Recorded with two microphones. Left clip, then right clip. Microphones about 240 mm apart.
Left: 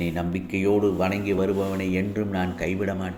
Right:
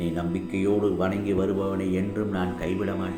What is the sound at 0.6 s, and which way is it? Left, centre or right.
A man's voice, left.